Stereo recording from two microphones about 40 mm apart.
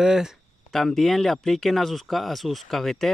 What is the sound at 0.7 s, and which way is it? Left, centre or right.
Speech, centre.